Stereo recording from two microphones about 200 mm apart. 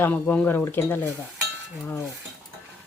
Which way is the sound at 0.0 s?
10° left (ahead or behind).